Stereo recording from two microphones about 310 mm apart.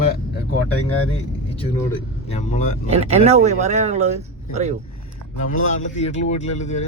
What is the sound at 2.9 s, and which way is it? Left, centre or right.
Speech, right.